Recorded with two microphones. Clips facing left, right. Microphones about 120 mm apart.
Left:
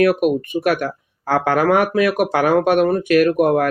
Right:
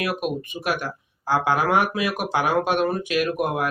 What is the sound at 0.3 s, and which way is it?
Speech, 55° left (ahead or behind).